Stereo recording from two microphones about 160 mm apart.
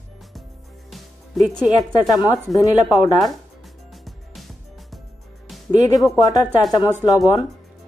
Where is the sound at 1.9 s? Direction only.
25° left (ahead or behind).